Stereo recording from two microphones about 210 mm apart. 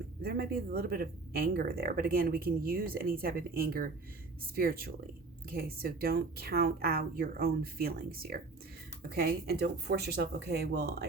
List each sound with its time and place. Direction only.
0.2 s speech: 45° right (ahead or behind)